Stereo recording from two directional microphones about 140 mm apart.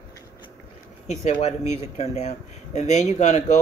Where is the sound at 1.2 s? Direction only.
50° left (ahead or behind).